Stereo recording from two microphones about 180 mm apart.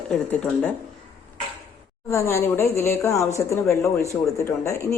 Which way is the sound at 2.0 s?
15° left (ahead or behind).